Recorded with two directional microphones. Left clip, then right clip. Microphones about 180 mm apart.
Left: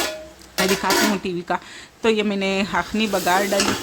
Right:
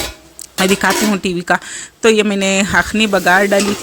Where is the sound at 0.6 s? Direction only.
30° right (ahead or behind).